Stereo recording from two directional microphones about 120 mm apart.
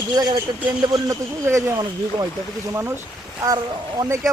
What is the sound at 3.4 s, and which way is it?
Speech, 30° right (ahead or behind).